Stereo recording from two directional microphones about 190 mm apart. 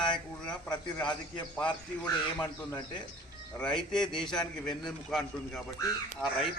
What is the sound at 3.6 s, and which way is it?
Speech, 5° left (ahead or behind).